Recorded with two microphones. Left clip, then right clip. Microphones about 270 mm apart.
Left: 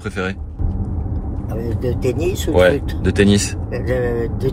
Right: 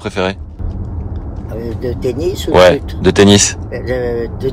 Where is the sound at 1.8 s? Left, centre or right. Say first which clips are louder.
Right 2 dB; centre.